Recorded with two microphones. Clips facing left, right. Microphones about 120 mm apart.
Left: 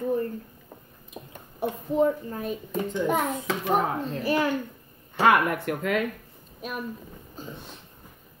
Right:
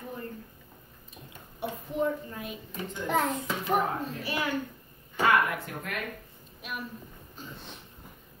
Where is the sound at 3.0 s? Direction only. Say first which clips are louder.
Left 1 dB; 20° left (ahead or behind).